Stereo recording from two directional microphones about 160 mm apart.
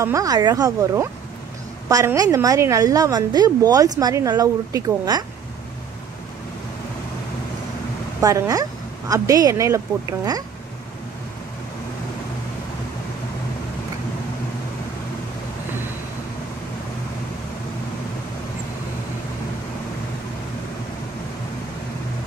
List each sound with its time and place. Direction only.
0.0 s a woman's voice: 20° right (ahead or behind)
8.2 s a woman's voice: 20° right (ahead or behind)